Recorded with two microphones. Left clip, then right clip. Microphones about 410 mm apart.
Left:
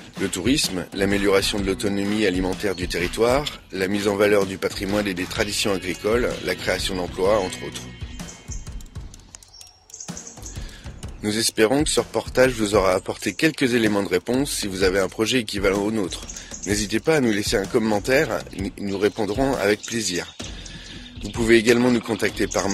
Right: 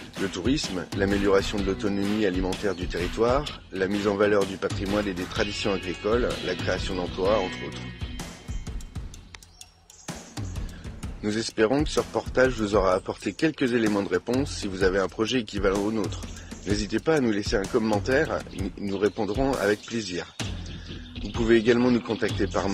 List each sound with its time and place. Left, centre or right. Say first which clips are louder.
0.5 s speech: left 7 dB; right
11.2 s speech: left 4 dB; right
21.5 s speech: left 4 dB; right